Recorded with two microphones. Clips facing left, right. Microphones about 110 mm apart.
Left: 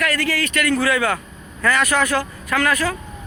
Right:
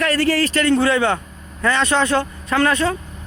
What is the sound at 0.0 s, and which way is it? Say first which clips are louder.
Speech: right 4 dB; 30° right (ahead or behind).